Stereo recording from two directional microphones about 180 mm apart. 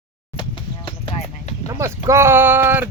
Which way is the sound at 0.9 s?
30° left (ahead or behind).